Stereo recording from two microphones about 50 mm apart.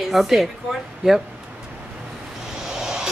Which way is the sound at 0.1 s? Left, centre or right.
Centre.